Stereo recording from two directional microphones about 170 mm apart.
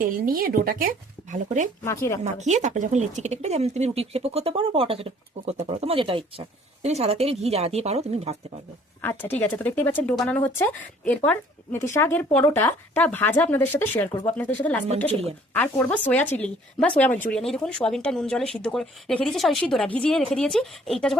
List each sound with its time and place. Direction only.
0.0 s speech: 60° right (ahead or behind)
1.8 s speech: 15° left (ahead or behind)
2.2 s speech: 45° right (ahead or behind)
9.0 s speech: 10° left (ahead or behind)